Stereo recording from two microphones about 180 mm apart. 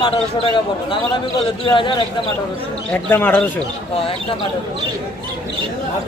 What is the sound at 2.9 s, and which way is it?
Speech, 10° left (ahead or behind).